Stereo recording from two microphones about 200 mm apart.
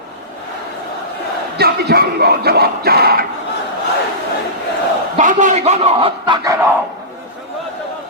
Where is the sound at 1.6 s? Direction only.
50° right (ahead or behind).